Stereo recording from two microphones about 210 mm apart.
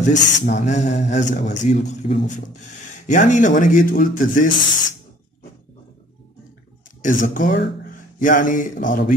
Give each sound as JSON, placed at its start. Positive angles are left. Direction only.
{"t": 0.1, "sound": "speech", "side_deg": 35}
{"t": 7.0, "sound": "speech", "side_deg": 40}
{"t": 7.5, "sound": "speech", "side_deg": 55}
{"t": 7.9, "sound": "speech", "side_deg": 40}